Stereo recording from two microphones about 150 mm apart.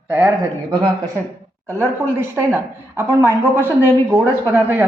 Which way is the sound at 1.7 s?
15° right (ahead or behind).